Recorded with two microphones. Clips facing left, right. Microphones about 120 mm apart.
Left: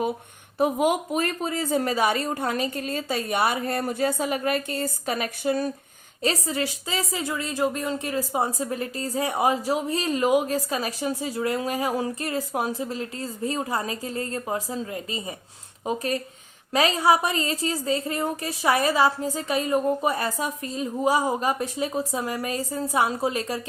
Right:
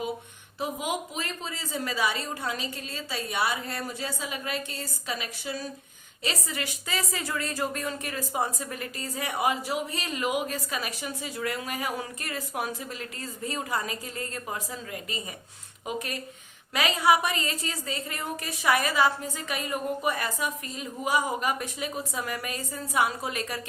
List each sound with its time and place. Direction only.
0.6 s a woman's voice: 55° left (ahead or behind)
6.2 s a woman's voice: 35° left (ahead or behind)